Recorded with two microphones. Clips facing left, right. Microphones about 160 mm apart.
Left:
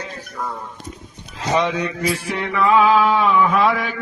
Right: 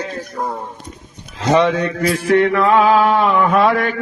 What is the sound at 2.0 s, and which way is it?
Mantra, 60° right (ahead or behind).